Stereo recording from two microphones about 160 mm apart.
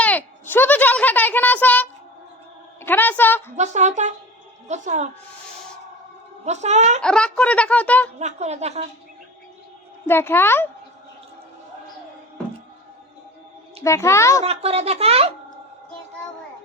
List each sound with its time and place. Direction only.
0.0 s a child's voice: 10° left (ahead or behind)
3.5 s speech: 45° right (ahead or behind)
6.4 s speech: 45° right (ahead or behind)
7.0 s speech: 5° left (ahead or behind)
8.2 s speech: 45° right (ahead or behind)
10.1 s speech: 15° left (ahead or behind)
13.8 s speech: 20° left (ahead or behind)
14.4 s speech: 40° right (ahead or behind)